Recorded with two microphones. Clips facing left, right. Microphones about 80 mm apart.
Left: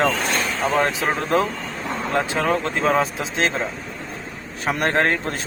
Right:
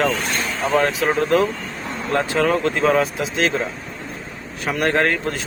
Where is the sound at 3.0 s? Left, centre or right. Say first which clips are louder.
Right 2 dB; left.